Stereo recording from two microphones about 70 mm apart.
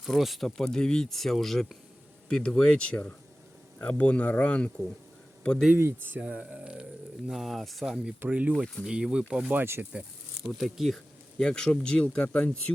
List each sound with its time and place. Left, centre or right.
0.0 s speech: centre
5.4 s a sound: centre
5.7 s speech: right
7.3 s speech: centre
8.2 s speech: right
9.5 s speech: right
10.5 s speech: centre
11.3 s speech: centre